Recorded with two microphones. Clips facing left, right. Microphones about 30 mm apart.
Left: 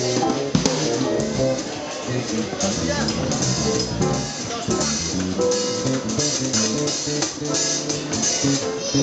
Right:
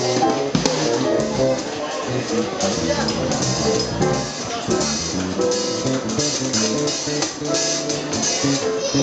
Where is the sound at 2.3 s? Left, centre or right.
Centre.